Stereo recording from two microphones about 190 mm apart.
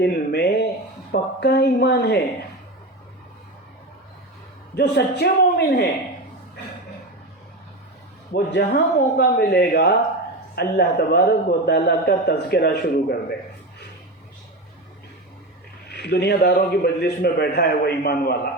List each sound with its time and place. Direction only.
0.0 s a sound: 55° left (ahead or behind)
1.1 s a woman's voice: 60° left (ahead or behind)
4.7 s a man's voice: 60° left (ahead or behind)
8.3 s a man's voice: 65° left (ahead or behind)
15.9 s a man's voice: 60° left (ahead or behind)